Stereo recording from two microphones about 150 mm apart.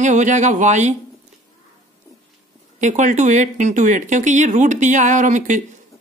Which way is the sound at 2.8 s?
55° right (ahead or behind).